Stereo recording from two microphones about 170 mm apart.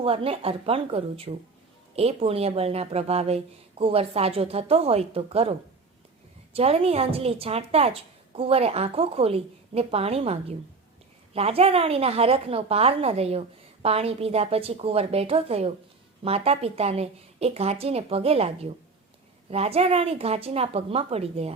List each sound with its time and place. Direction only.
0.0 s a woman's voice: 35° right (ahead or behind)
11.3 s a woman's voice: 35° right (ahead or behind)